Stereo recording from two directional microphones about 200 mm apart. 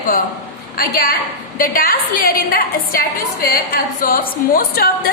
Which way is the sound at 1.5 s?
45° left (ahead or behind).